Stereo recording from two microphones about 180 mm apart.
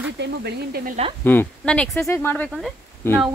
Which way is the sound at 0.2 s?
65° right (ahead or behind).